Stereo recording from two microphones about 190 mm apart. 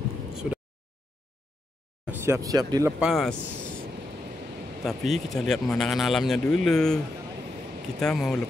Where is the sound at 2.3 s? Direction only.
20° right (ahead or behind).